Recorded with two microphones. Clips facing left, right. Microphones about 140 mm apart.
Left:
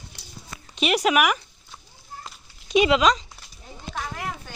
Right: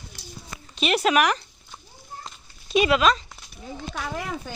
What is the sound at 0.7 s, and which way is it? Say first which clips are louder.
Speech: even; 15° left (ahead or behind).